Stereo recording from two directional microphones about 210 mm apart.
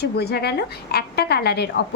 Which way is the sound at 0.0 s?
50° left (ahead or behind).